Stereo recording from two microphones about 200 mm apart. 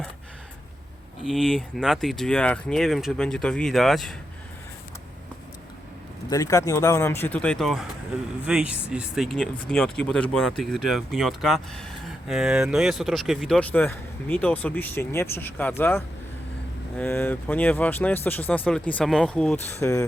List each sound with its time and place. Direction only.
1.2 s speech: centre (ahead or behind)
6.3 s speech: 15° left (ahead or behind)